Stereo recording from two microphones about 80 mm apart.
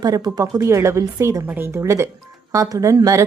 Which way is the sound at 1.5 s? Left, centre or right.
Right.